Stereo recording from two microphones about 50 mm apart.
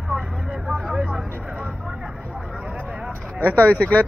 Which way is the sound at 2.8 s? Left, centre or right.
Right.